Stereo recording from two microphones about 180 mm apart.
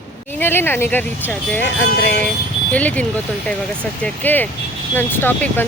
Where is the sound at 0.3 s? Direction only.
10° left (ahead or behind).